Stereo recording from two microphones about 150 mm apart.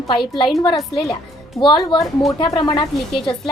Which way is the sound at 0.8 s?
Centre (ahead or behind).